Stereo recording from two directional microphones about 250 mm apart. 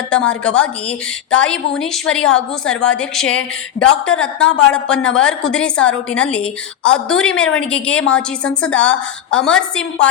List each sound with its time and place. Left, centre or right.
0.3 s a woman's voice: centre